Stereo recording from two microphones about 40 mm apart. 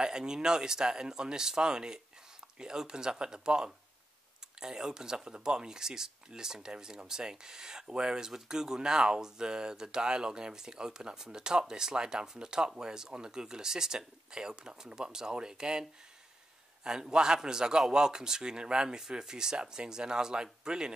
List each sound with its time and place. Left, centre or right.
0.0 s speech: centre
16.8 s speech: centre